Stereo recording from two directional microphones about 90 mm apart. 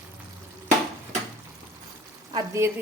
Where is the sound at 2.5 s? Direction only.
30° right (ahead or behind).